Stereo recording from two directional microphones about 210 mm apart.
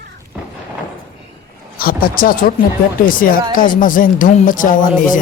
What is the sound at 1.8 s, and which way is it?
Speech, 45° left (ahead or behind).